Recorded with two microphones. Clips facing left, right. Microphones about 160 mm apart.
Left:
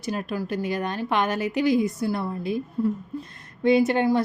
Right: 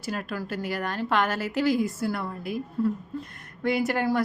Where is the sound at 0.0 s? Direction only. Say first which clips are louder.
Left 3 dB; 20° left (ahead or behind).